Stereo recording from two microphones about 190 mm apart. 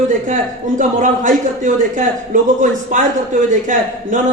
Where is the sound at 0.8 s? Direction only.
40° right (ahead or behind).